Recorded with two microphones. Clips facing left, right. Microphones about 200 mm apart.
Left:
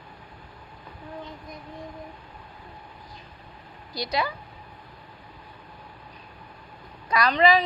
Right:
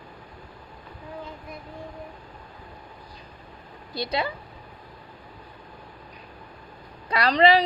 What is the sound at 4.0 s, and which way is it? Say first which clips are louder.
Speech: even; 25° right (ahead or behind).